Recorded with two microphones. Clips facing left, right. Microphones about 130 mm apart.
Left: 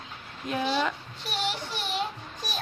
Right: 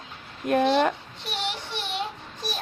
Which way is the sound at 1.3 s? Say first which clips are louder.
Even; 25° right (ahead or behind).